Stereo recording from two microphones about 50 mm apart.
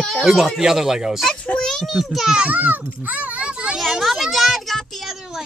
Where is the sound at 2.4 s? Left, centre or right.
Right.